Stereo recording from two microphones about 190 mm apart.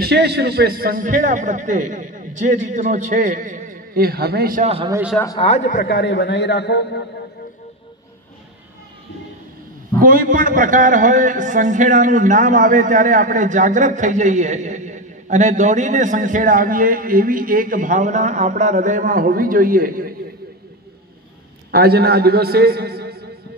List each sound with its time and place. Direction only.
0.0 s a man's voice: 60° right (ahead or behind)
4.6 s a man's voice: 30° right (ahead or behind)
5.4 s a man's voice: 35° left (ahead or behind); by 7.1 s 65° left (ahead or behind)
9.9 s a man's voice: 50° right (ahead or behind)
21.7 s a man's voice: 55° right (ahead or behind)